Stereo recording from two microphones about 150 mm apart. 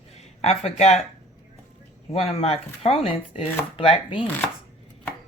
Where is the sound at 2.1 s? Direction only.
40° left (ahead or behind).